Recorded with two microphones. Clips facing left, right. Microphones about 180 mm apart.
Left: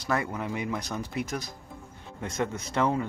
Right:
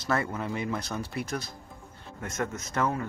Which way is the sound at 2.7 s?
15° left (ahead or behind).